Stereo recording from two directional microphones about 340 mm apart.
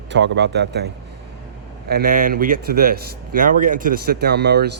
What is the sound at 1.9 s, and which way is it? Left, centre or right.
A man's voice, right.